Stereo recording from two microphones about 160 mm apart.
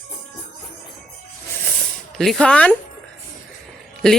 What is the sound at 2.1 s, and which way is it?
Speech, 5° left (ahead or behind).